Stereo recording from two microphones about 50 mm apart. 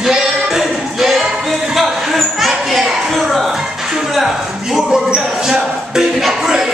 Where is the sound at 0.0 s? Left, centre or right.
Centre.